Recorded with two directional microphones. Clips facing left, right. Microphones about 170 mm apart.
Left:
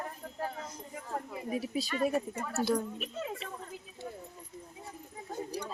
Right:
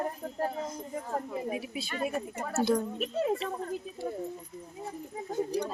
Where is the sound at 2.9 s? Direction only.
40° right (ahead or behind).